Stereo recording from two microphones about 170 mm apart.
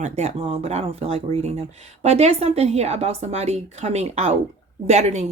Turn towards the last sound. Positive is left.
turn(degrees=-40)  # may be behind; listen again after turning